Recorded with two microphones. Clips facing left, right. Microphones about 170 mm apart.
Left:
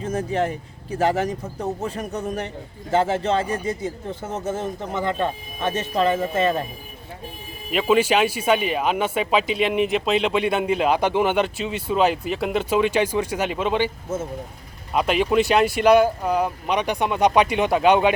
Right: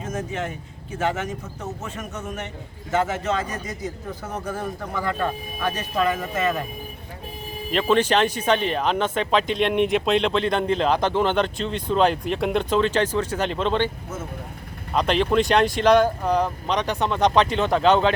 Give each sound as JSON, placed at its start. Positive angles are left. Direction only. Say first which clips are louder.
{"t": 0.0, "sound": "a man's voice", "louder": "left 5 dB", "side_deg": 30}
{"t": 7.7, "sound": "speech", "louder": "left 1 dB", "side_deg": 5}
{"t": 14.9, "sound": "speech", "louder": "left 1 dB", "side_deg": 10}